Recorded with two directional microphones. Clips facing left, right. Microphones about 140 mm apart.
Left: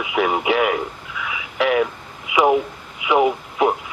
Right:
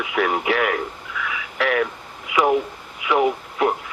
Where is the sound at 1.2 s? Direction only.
10° left (ahead or behind).